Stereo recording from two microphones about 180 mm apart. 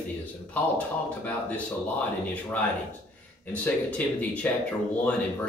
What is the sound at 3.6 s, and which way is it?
Speech, 10° left (ahead or behind).